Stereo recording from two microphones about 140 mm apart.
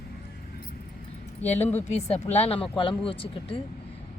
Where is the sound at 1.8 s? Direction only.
50° left (ahead or behind).